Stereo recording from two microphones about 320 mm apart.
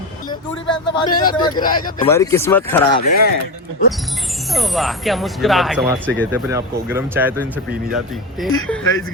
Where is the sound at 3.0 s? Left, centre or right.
Left.